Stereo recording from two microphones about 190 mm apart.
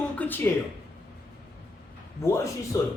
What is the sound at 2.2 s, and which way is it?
Speech, 15° left (ahead or behind).